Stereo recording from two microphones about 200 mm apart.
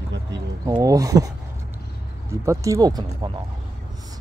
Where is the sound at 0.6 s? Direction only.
15° right (ahead or behind).